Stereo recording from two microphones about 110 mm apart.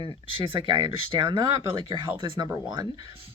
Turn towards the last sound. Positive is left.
turn(degrees=-40)  # may be behind; listen again after turning